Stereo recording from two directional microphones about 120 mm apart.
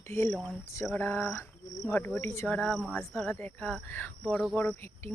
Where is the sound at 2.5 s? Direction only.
5° left (ahead or behind).